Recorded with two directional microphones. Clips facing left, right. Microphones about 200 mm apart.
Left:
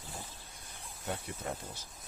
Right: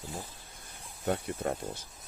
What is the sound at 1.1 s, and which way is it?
Speech, 55° right (ahead or behind).